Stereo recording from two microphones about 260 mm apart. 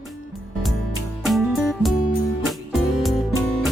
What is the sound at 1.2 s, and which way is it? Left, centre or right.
Music, centre.